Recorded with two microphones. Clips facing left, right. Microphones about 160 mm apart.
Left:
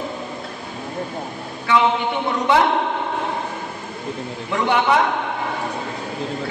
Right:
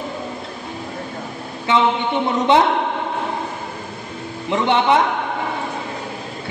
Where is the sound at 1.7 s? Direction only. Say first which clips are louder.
Even; 20° right (ahead or behind).